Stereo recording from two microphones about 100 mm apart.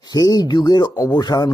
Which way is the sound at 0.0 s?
40° left (ahead or behind).